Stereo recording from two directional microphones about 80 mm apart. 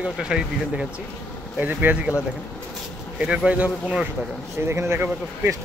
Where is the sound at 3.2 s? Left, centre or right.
Centre.